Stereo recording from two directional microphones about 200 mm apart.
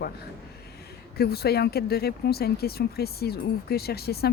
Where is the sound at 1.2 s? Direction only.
50° left (ahead or behind).